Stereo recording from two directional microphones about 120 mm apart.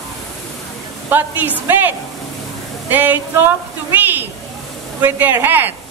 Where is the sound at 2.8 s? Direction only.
15° right (ahead or behind).